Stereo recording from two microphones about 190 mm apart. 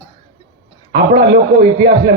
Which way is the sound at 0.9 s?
65° right (ahead or behind).